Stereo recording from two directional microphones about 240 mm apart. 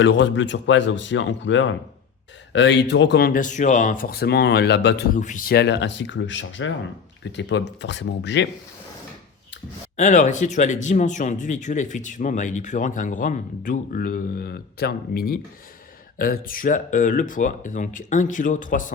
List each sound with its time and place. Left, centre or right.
0.0 s speech: left
5.2 s speech: left
10.0 s speech: left